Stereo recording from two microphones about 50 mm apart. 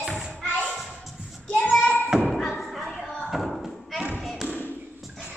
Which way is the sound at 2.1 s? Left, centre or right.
Centre.